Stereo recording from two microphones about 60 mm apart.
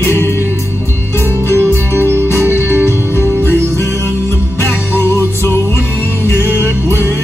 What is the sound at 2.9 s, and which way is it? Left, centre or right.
Music, left.